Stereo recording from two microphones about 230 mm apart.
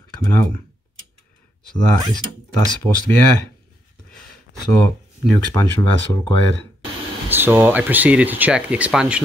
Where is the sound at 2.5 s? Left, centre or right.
Centre.